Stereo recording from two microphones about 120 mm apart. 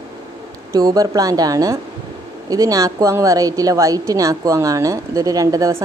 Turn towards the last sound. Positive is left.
turn(degrees=-30)  # may be behind; listen again after turning